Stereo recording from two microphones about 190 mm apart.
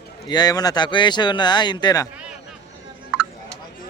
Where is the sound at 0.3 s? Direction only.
20° left (ahead or behind).